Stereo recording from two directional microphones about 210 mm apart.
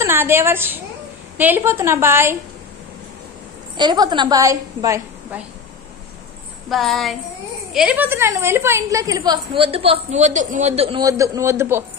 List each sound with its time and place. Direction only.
0.0 s a woman's voice: 10° right (ahead or behind)
3.7 s a woman's voice: 20° right (ahead or behind)
6.7 s jingle bell: centre (ahead or behind)
7.7 s a woman's voice: 5° right (ahead or behind)